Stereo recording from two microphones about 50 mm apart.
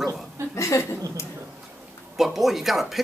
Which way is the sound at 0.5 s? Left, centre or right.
Left.